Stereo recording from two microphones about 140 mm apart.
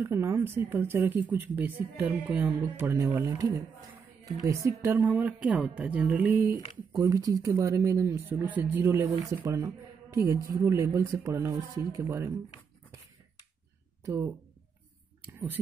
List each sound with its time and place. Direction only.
0.0 s speech: 20° right (ahead or behind)
7.0 s speech: 25° right (ahead or behind)
14.0 s speech: 15° right (ahead or behind)